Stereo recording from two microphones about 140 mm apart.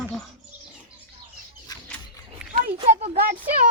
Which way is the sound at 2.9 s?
50° right (ahead or behind).